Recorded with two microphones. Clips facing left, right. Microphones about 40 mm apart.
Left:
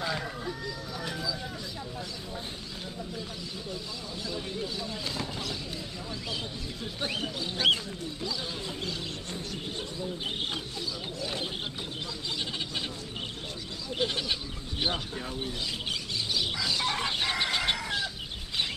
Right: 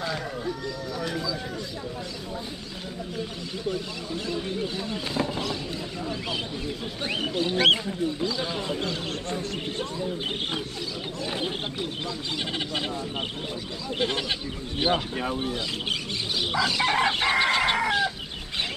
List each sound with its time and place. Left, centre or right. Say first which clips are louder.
0.0 s a sound: right 3 dB; centre
4.3 s speech: right 5 dB; right
7.3 s speech: right 6 dB; right
7.7 s speech: right 7 dB; right
8.4 s speech: right 7 dB; right
12.4 s speech: right 5 dB; right
13.9 s speech: right 3 dB; right
14.8 s speech: right 7 dB; centre
15.1 s speech: right 7 dB; right
17.3 s chicken: right 7 dB; right